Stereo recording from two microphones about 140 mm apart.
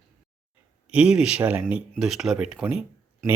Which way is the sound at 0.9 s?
5° right (ahead or behind).